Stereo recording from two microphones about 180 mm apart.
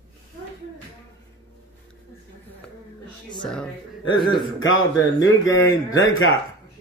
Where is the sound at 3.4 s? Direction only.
5° left (ahead or behind).